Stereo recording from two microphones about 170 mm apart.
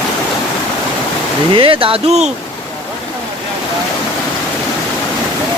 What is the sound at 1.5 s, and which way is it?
Speech, 30° right (ahead or behind).